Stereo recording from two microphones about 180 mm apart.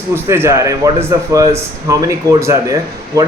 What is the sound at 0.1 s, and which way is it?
A man's voice, 15° right (ahead or behind).